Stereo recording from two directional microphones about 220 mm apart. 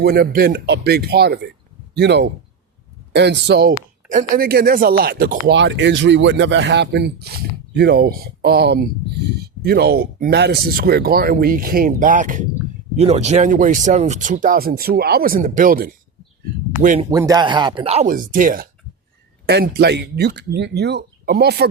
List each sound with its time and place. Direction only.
0.0 s speech: 45° right (ahead or behind)
17.0 s speech: 15° right (ahead or behind); by 21.7 s 50° right (ahead or behind)